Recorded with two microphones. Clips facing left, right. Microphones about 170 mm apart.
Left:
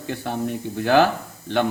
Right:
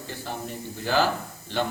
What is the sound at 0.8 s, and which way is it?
Speech, 60° left (ahead or behind).